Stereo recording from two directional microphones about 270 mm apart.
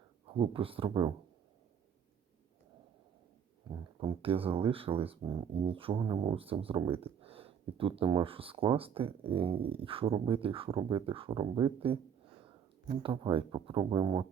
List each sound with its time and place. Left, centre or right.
0.3 s speech: centre
3.7 s speech: centre
13.0 s speech: centre